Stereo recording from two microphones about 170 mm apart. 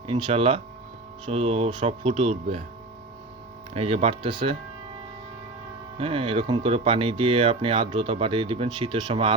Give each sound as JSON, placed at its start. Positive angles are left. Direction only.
{"t": 0.1, "sound": "speech", "side_deg": -30}
{"t": 3.8, "sound": "speech", "side_deg": -40}
{"t": 6.0, "sound": "speech", "side_deg": -35}